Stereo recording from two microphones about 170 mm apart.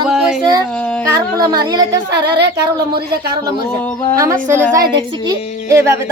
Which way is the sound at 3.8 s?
15° left (ahead or behind).